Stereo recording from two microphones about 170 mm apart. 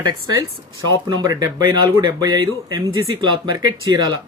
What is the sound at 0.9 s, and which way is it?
Speech, 25° right (ahead or behind).